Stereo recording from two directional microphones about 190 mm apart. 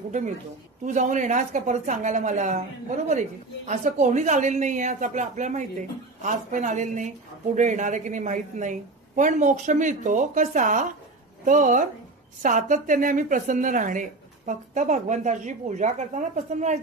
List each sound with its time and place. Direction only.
0.8 s a woman's voice: 40° right (ahead or behind)